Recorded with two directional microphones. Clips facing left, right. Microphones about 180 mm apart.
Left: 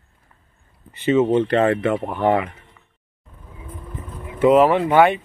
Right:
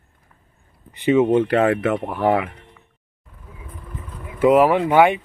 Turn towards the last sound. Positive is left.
turn(degrees=-15)  # may be behind; listen again after turning